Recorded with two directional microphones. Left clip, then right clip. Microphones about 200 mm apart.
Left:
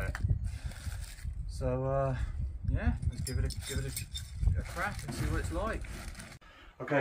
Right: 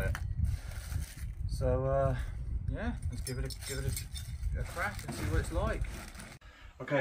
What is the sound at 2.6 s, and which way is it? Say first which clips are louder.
Speech: left 1 dB; 10° right (ahead or behind).